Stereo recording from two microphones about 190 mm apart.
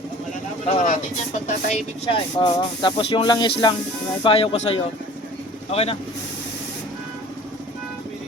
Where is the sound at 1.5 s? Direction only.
35° left (ahead or behind).